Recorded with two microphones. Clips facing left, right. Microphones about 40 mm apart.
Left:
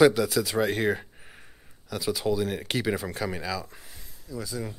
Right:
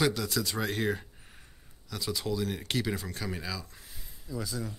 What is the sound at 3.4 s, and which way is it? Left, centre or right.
Speech, centre.